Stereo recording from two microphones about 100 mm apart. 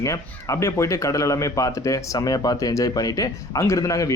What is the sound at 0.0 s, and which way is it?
Speech, 30° left (ahead or behind).